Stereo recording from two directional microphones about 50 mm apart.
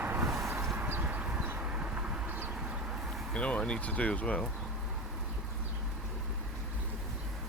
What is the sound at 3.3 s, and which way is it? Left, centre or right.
Speech, left.